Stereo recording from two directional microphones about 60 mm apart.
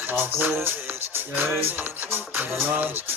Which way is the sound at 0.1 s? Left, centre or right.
Right.